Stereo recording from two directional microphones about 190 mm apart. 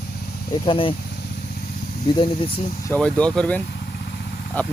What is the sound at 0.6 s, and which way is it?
Speech, 25° left (ahead or behind).